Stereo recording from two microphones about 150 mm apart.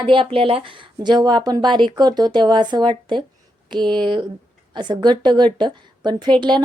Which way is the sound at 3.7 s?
30° right (ahead or behind).